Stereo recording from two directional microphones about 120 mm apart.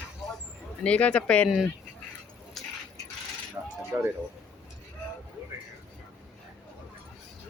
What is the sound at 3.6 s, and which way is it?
Coin, 30° right (ahead or behind).